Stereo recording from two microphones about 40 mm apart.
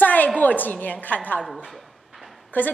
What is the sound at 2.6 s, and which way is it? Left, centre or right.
Speech, left.